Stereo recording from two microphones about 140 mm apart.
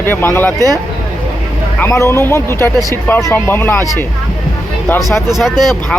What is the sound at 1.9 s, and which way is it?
Speech, 20° left (ahead or behind).